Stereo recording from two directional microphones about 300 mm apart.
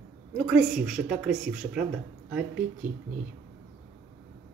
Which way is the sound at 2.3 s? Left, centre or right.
Centre.